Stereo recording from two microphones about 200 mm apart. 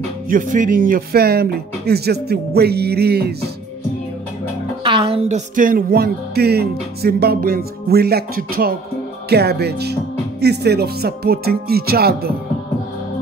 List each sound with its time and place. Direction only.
0.3 s speech: 40° right (ahead or behind)
4.8 s music: 25° right (ahead or behind)
5.6 s speech: 45° right (ahead or behind)